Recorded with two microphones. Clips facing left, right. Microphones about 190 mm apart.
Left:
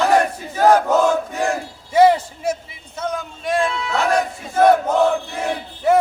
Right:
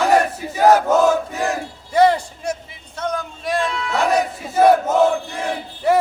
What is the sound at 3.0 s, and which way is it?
Battle cry, centre (ahead or behind).